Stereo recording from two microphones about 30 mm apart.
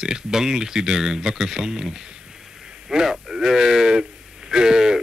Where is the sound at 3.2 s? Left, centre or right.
Centre.